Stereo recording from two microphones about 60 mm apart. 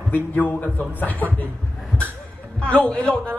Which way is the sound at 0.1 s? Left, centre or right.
Left.